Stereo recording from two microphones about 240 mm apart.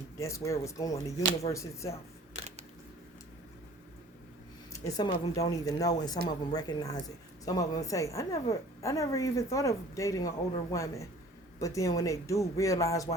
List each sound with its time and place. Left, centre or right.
0.2 s a woman's voice: centre
4.7 s a woman's voice: centre